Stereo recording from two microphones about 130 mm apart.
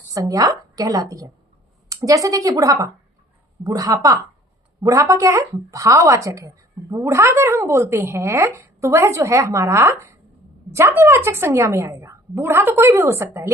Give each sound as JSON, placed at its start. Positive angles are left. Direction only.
{"t": 0.1, "sound": "speech", "side_deg": -25}